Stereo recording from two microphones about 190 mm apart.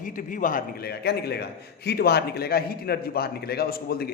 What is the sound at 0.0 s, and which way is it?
A man's voice, 45° left (ahead or behind).